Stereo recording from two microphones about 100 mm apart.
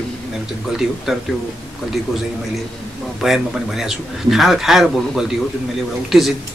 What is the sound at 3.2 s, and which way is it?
Speech, 5° right (ahead or behind).